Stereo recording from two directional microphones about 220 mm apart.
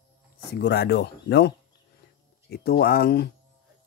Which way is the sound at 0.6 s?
50° left (ahead or behind).